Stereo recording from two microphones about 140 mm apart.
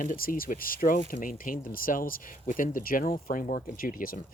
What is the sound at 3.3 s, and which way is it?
Speech, 70° left (ahead or behind).